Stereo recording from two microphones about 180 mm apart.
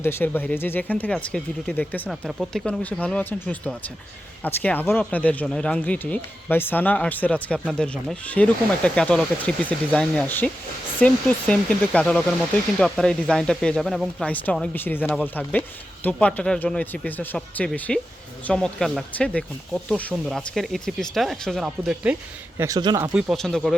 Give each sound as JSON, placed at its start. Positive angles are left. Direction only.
{"t": 0.0, "sound": "speech", "side_deg": 15}
{"t": 22.5, "sound": "speech", "side_deg": -20}
{"t": 23.1, "sound": "speech", "side_deg": -5}